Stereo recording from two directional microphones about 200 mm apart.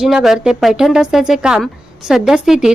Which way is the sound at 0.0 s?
Centre (ahead or behind).